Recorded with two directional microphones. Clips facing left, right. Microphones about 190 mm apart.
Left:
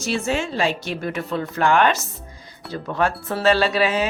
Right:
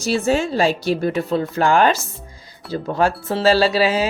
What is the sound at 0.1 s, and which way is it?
Speech, 40° right (ahead or behind).